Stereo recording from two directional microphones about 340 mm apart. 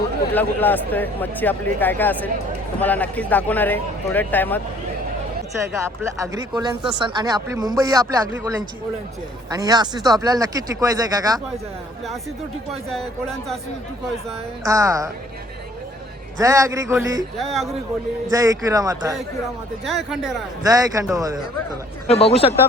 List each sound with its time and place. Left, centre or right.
0.3 s speech: centre
5.7 s speech: centre
12.9 s speech: centre
14.6 s speech: centre
16.4 s speech: centre
18.3 s speech: centre
22.0 s speech: centre